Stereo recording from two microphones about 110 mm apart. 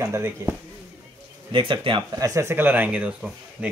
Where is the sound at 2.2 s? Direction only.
25° right (ahead or behind).